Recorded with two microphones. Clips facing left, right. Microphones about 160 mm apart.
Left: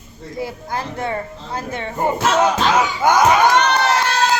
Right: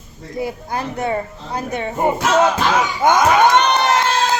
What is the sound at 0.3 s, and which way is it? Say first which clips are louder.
Speech: right 2 dB; 20° right (ahead or behind).